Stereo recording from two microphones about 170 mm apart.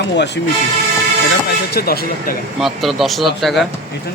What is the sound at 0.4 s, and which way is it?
Speech, 90° left.